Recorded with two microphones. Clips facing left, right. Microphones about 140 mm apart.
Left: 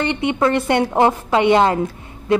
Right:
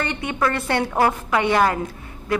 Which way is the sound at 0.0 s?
20° left (ahead or behind).